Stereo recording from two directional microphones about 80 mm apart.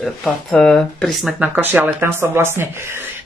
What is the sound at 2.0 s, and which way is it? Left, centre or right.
Speech, right.